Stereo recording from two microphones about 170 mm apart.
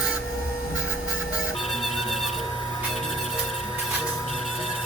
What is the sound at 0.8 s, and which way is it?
Music, 5° right (ahead or behind).